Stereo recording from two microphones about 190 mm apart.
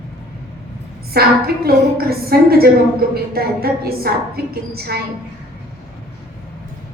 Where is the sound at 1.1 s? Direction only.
55° right (ahead or behind).